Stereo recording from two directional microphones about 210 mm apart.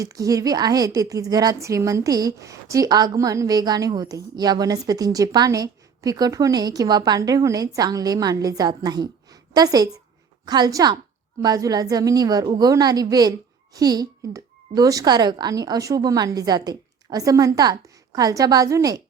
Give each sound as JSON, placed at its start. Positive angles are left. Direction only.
{"t": 0.0, "sound": "a woman's voice", "side_deg": -15}